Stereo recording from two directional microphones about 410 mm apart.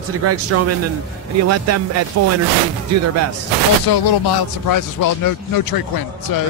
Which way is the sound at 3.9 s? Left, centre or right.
Left.